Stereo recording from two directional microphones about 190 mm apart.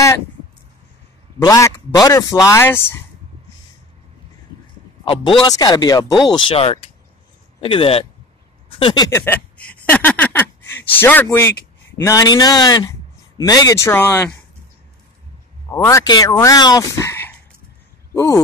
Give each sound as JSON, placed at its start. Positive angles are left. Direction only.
{"t": 1.4, "sound": "speech", "side_deg": 20}
{"t": 5.0, "sound": "speech", "side_deg": 30}
{"t": 15.7, "sound": "speech", "side_deg": 15}